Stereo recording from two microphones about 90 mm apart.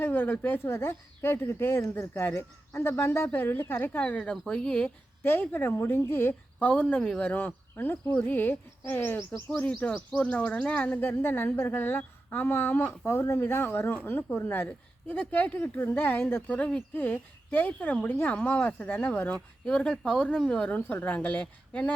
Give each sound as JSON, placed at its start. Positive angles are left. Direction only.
{"t": 0.0, "sound": "speech", "side_deg": 20}
{"t": 5.2, "sound": "speech", "side_deg": 20}
{"t": 19.6, "sound": "speech", "side_deg": 10}
{"t": 20.7, "sound": "speech", "side_deg": 20}